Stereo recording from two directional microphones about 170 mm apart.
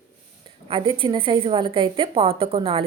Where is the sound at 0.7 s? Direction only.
30° right (ahead or behind).